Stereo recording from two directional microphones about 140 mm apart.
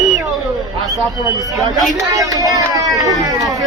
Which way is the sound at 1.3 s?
25° right (ahead or behind).